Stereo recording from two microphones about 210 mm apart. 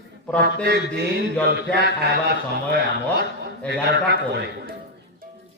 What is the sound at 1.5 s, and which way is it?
Speech, 50° right (ahead or behind).